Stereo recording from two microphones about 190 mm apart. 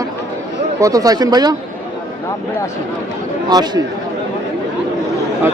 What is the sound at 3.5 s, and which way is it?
Speech, 20° right (ahead or behind).